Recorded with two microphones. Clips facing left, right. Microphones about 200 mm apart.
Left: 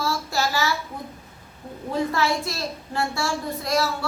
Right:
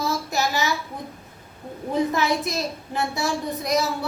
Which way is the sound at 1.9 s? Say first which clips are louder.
Right 1 dB; 20° right (ahead or behind).